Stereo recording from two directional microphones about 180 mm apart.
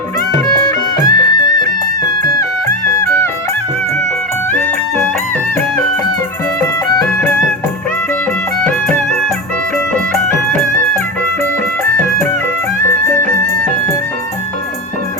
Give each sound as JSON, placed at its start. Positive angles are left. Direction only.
{"t": 0.4, "sound": "music", "side_deg": 20}
{"t": 12.9, "sound": "music", "side_deg": 15}